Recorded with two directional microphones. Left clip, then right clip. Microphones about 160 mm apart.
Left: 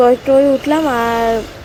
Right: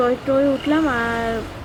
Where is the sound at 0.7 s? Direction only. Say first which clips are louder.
Left 5 dB; 25° left (ahead or behind).